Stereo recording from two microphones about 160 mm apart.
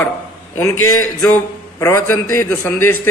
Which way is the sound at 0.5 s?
15° left (ahead or behind).